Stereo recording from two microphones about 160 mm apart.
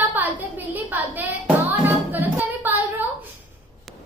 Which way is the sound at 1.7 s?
10° right (ahead or behind).